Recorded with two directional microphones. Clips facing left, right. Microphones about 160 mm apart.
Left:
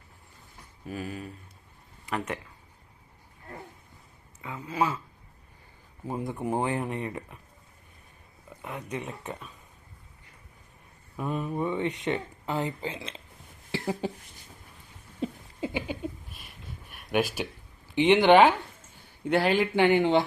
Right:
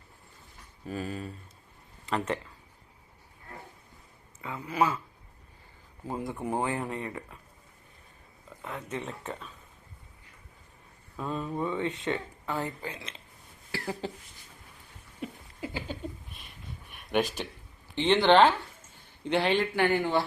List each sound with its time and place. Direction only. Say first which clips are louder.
0.9 s speech: right 1 dB; 10° left (ahead or behind)
4.4 s speech: right 1 dB; 20° left (ahead or behind)
6.1 s speech: left 2 dB; 20° left (ahead or behind)
8.4 s speech: left 1 dB; 15° left (ahead or behind)
11.2 s speech: left 2 dB; 15° left (ahead or behind); by 13.2 s 30° left (ahead or behind)
13.7 s a sound: left 4 dB; 20° left (ahead or behind)
15.2 s a sound: left 6 dB; 30° left (ahead or behind)
16.3 s a sound: left 1 dB; centre (ahead or behind)
17.9 s speech: left 3 dB; 15° left (ahead or behind)
19.7 s speech: left 4 dB; 20° left (ahead or behind)